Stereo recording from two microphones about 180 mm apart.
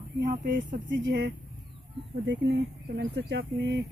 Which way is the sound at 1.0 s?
60° right (ahead or behind).